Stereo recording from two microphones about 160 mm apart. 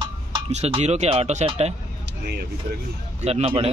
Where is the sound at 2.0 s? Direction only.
90° right.